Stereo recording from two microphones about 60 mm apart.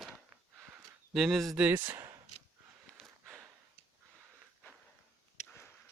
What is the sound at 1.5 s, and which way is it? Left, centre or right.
Speech, right.